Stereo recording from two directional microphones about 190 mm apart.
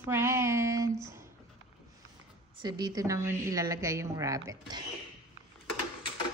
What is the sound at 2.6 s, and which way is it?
Speech, 20° right (ahead or behind).